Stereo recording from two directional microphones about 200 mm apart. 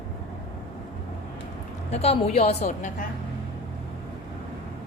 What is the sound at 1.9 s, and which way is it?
A woman's voice, 30° left (ahead or behind).